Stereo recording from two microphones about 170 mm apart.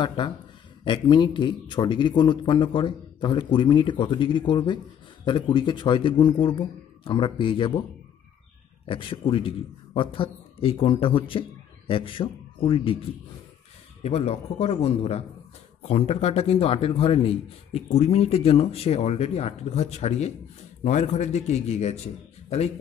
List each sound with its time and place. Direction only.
0.0 s a man's voice: 30° left (ahead or behind)
8.8 s a man's voice: 30° left (ahead or behind)
14.0 s a man's voice: 40° left (ahead or behind)